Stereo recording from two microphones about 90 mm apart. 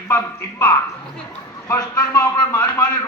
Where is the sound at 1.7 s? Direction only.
35° left (ahead or behind).